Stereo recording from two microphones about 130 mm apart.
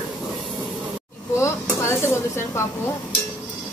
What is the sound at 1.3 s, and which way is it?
Dishes, 20° left (ahead or behind).